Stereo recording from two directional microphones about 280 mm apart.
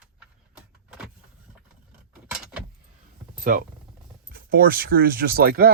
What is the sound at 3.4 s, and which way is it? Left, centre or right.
Speech, right.